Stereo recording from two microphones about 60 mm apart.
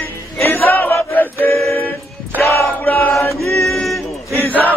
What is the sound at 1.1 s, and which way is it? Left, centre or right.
Chant, left.